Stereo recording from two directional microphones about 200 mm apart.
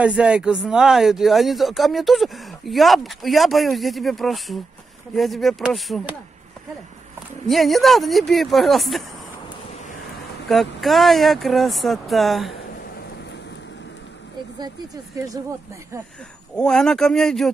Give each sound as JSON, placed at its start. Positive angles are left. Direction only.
{"t": 0.0, "sound": "speech", "side_deg": -5}
{"t": 7.4, "sound": "speech", "side_deg": 0}
{"t": 10.5, "sound": "speech", "side_deg": 0}
{"t": 15.1, "sound": "speech", "side_deg": -20}
{"t": 16.5, "sound": "speech", "side_deg": 5}